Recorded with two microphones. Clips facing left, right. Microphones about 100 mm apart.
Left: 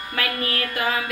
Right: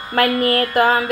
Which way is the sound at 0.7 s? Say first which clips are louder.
Right 8 dB; 45° right (ahead or behind).